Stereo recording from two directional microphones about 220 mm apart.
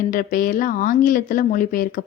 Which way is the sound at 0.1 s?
40° left (ahead or behind).